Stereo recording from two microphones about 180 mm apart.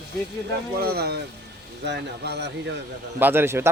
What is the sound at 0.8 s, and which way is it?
Speech, 60° right (ahead or behind).